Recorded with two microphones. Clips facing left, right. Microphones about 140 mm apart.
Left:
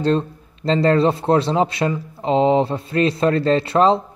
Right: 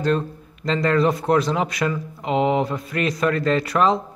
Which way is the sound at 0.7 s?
30° left (ahead or behind).